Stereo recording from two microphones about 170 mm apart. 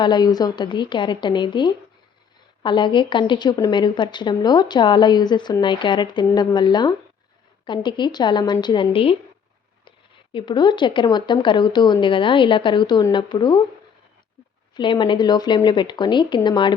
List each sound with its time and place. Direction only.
0.0 s a woman's voice: 25° left (ahead or behind)
10.3 s a woman's voice: 25° left (ahead or behind)
14.8 s a woman's voice: 30° left (ahead or behind)